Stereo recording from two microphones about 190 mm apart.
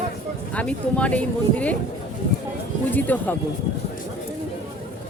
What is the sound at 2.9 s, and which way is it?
Speech, 10° left (ahead or behind).